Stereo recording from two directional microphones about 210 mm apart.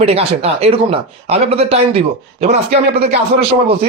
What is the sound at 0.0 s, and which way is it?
Speech, 30° right (ahead or behind).